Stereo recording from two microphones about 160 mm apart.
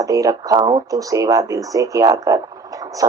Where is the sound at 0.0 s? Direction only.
20° right (ahead or behind).